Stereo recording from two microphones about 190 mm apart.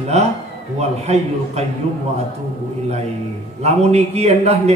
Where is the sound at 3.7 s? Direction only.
35° right (ahead or behind).